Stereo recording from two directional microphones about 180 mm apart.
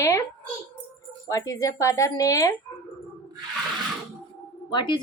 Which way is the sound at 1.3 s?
20° left (ahead or behind).